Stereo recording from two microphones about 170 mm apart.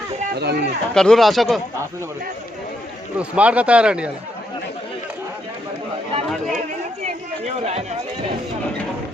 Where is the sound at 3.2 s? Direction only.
5° right (ahead or behind).